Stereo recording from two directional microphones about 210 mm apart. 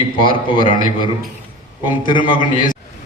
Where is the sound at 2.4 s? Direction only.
40° left (ahead or behind).